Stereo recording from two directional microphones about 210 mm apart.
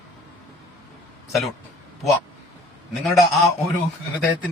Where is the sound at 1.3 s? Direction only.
Centre (ahead or behind).